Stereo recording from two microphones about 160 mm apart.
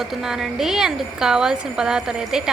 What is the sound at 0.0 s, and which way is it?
A woman's voice, centre (ahead or behind).